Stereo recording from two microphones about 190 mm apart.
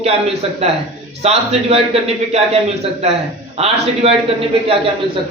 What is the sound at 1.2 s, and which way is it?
A man's voice, 35° right (ahead or behind).